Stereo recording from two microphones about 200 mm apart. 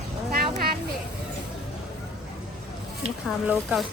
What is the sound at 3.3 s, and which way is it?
Speech, centre (ahead or behind).